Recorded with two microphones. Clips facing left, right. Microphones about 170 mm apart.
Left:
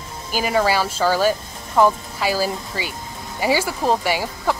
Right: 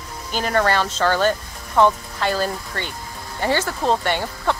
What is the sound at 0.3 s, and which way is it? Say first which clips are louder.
Speech: left 1 dB; 5° left (ahead or behind).